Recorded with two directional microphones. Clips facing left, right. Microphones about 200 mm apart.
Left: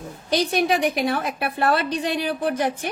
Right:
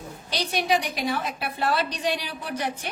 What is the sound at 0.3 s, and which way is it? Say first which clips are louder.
A woman's voice: left 5 dB; 55° left (ahead or behind).